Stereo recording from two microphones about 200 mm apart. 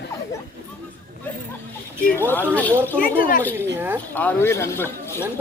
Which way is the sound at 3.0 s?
45° left (ahead or behind).